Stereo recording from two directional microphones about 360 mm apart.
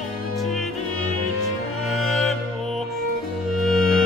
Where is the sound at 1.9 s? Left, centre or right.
Centre.